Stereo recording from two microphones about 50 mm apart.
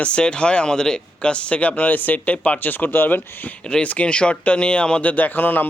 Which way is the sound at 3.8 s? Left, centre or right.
Left.